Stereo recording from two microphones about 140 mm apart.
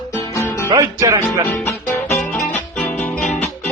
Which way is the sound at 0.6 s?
25° right (ahead or behind).